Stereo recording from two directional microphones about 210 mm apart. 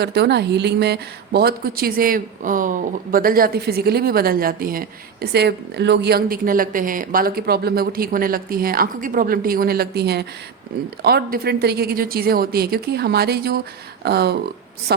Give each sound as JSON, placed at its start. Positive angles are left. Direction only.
{"t": 0.0, "sound": "a woman's voice", "side_deg": -50}